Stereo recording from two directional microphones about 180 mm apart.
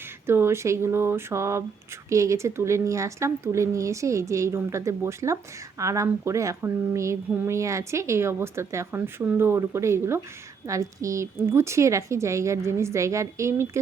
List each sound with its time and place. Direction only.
0.3 s speech: 15° right (ahead or behind)